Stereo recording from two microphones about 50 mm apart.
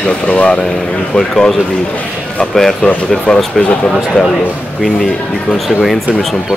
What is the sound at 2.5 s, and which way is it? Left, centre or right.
A man's voice, centre.